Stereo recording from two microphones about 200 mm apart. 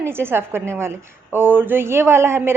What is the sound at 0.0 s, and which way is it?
A woman's voice, 10° right (ahead or behind).